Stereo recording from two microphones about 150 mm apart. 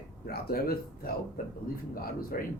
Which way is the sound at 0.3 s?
90° left.